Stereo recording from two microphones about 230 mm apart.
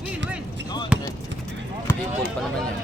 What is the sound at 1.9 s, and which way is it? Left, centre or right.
Run, centre.